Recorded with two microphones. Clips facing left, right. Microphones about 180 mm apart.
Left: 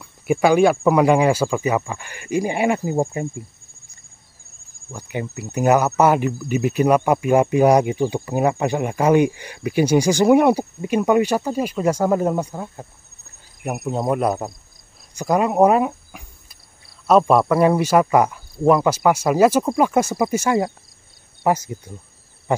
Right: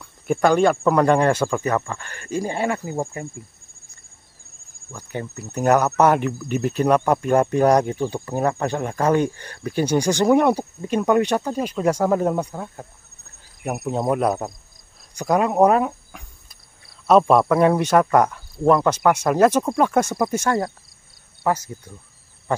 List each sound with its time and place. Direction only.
0.0 s speech: 5° left (ahead or behind)
4.9 s speech: 10° left (ahead or behind)
13.7 s cricket: centre (ahead or behind)
15.1 s speech: centre (ahead or behind)
17.1 s cricket: centre (ahead or behind)
21.4 s speech: 15° left (ahead or behind)
22.5 s a sound: 15° left (ahead or behind)